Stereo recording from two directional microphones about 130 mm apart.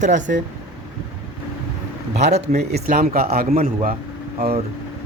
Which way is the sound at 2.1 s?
60° right (ahead or behind).